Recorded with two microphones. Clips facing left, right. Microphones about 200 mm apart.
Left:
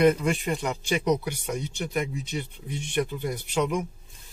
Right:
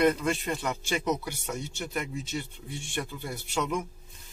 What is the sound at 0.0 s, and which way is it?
Speech, 15° left (ahead or behind).